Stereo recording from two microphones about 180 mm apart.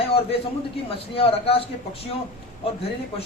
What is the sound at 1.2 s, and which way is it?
Speech, 30° left (ahead or behind).